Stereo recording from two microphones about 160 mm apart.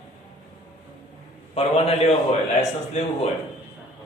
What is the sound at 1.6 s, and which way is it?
A man's voice, 40° left (ahead or behind).